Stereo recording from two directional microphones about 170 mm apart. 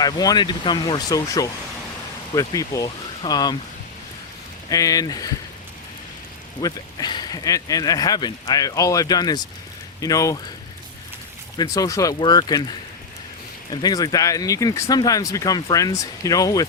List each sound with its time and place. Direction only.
0.0 s speech: 20° left (ahead or behind)
4.7 s speech: 20° left (ahead or behind)
6.6 s speech: 25° left (ahead or behind)
11.5 s speech: 20° left (ahead or behind)